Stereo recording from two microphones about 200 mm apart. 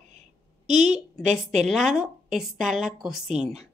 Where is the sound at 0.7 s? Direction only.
35° right (ahead or behind).